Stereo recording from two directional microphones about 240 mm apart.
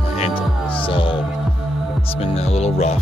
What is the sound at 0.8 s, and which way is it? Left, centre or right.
Hum, left.